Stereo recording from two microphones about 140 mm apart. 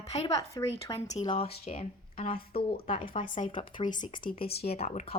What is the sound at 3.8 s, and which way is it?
Speech, 65° left (ahead or behind).